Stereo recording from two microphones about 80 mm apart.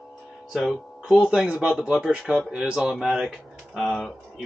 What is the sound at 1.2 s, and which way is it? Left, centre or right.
Speech, centre.